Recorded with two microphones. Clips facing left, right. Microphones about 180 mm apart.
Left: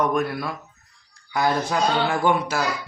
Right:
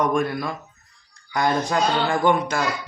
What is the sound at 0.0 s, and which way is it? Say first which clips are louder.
Speech: right 1 dB; 5° left (ahead or behind).